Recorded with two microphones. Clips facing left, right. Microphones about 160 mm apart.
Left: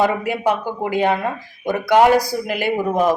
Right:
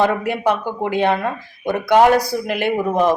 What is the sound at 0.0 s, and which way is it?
A woman's voice, 10° left (ahead or behind).